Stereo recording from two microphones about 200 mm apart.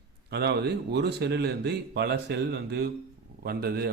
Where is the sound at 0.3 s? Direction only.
55° right (ahead or behind).